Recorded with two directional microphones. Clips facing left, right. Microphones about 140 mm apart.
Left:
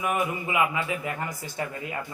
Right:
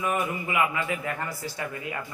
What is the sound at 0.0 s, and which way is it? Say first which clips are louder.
Speech: left 1 dB; 20° left (ahead or behind).